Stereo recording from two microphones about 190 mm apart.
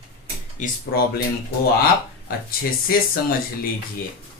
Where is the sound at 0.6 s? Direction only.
40° left (ahead or behind).